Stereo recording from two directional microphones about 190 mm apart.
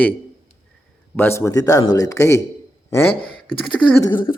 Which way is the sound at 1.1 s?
10° left (ahead or behind).